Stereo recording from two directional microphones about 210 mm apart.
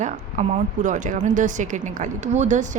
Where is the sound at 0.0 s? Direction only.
35° right (ahead or behind).